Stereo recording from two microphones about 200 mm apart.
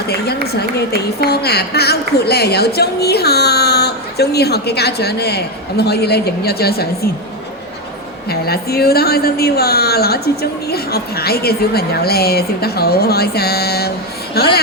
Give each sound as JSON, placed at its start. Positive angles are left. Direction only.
{"t": 0.9, "sound": "a woman's voice", "side_deg": 55}
{"t": 8.3, "sound": "a woman's voice", "side_deg": 50}